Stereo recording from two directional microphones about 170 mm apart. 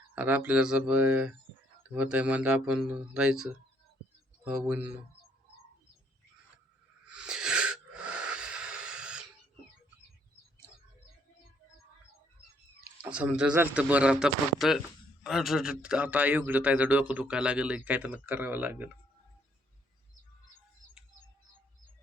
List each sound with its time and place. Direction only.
0.2 s a man's voice: 10° right (ahead or behind)
7.1 s wheeze: 5° right (ahead or behind)
13.0 s a man's voice: 5° right (ahead or behind)